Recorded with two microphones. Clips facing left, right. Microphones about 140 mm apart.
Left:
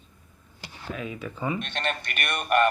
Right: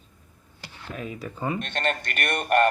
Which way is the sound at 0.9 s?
40° right (ahead or behind).